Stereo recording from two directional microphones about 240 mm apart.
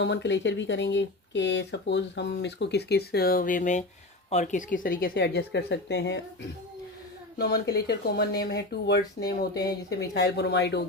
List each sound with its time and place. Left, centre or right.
0.0 s speech: left
7.3 s speech: left